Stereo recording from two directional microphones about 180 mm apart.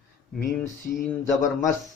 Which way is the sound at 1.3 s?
Centre (ahead or behind).